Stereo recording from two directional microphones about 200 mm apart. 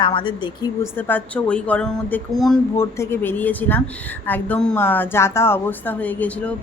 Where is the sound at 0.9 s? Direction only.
10° left (ahead or behind).